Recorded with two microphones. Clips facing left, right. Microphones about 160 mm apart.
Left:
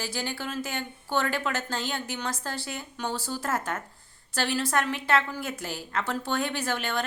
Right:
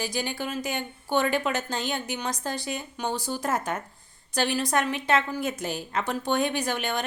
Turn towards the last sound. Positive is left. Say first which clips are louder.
# right 1 dB
turn(degrees=-15)  # may be behind; listen again after turning